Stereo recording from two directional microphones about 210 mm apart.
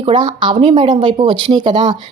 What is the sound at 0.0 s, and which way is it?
Speech, 20° right (ahead or behind).